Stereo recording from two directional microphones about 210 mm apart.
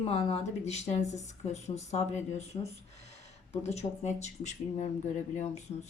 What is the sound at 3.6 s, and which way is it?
A woman's voice, 30° left (ahead or behind).